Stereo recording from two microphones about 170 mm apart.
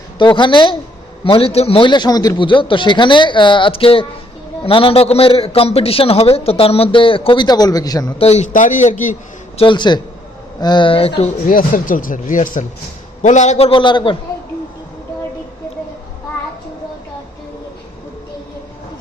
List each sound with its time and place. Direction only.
0.2 s a man's voice: 25° left (ahead or behind)
8.2 s speech: 40° left (ahead or behind)
9.6 s a man's voice: 30° left (ahead or behind)
11.4 s a man's voice: 55° left (ahead or behind); by 14.2 s 30° left (ahead or behind)